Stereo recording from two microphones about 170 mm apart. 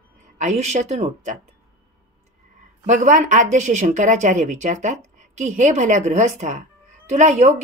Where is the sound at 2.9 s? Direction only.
45° right (ahead or behind).